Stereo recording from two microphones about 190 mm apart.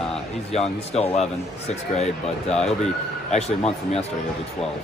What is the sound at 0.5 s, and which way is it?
Speech, 35° left (ahead or behind).